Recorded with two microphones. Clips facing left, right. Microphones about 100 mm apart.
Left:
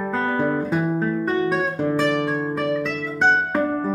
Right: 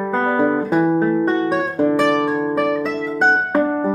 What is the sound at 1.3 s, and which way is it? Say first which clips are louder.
Guitar: right 3 dB; 30° right (ahead or behind).